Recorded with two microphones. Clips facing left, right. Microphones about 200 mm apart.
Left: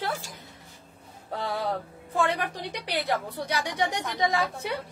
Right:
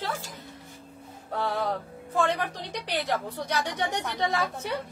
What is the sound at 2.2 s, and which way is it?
A woman's voice, 10° left (ahead or behind).